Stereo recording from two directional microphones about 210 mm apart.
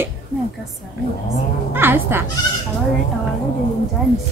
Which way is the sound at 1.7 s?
10° right (ahead or behind).